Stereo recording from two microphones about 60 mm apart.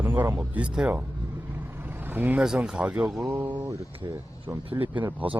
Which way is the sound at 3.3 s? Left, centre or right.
Right.